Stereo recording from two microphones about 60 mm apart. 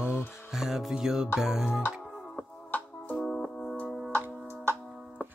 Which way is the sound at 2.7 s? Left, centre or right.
Left.